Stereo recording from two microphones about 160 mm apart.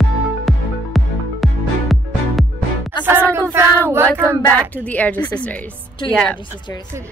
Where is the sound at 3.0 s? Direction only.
15° right (ahead or behind).